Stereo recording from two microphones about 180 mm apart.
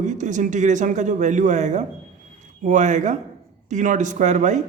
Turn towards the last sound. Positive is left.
turn(degrees=-40)  # may be behind; listen again after turning